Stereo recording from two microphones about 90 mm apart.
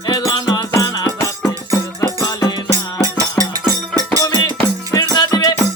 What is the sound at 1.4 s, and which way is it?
Music, 35° left (ahead or behind).